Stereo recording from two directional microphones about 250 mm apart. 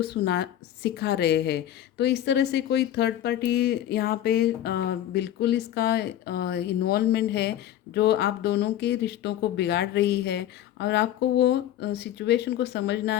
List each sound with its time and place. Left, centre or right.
0.0 s a woman's voice: left